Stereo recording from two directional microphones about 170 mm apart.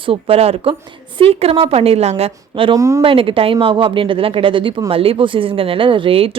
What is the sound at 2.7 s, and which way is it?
Speech, 20° right (ahead or behind).